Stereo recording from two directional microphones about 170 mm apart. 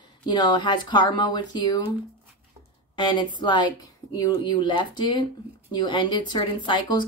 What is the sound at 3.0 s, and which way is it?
A woman's voice, 25° left (ahead or behind).